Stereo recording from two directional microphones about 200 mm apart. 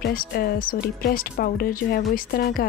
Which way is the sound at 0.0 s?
50° left (ahead or behind).